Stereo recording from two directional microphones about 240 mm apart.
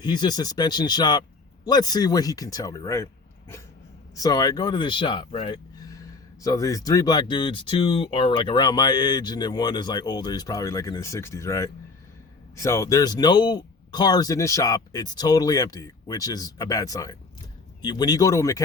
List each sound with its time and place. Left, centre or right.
0.0 s speech: centre
4.1 s speech: centre